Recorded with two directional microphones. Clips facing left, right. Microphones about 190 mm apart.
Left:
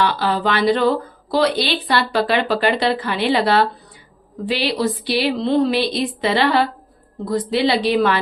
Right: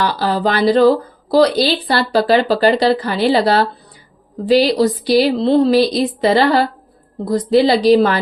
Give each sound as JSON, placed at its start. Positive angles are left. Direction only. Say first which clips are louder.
{"t": 0.0, "sound": "speech", "louder": "right 2 dB", "side_deg": -40}